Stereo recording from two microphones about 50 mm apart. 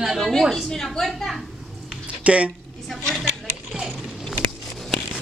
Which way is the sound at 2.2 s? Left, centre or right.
Right.